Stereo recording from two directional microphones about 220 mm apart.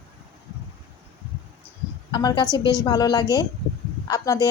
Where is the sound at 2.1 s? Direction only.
20° left (ahead or behind).